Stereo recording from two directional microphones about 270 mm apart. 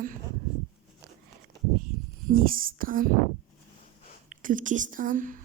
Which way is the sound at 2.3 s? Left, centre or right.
Right.